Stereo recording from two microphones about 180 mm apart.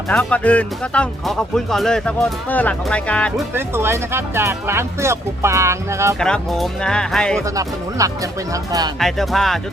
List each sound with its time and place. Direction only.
0.1 s speech: 5° left (ahead or behind)
3.5 s speech: 15° right (ahead or behind)
6.1 s speech: 5° left (ahead or behind)
7.5 s speech: 20° right (ahead or behind)
9.0 s speech: centre (ahead or behind)